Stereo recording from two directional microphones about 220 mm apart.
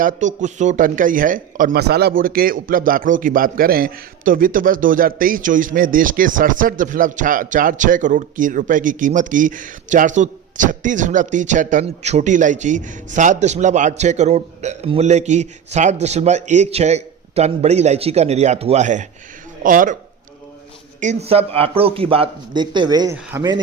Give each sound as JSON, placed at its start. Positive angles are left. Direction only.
{"t": 0.0, "sound": "speech", "side_deg": -35}
{"t": 21.0, "sound": "a man's voice", "side_deg": -30}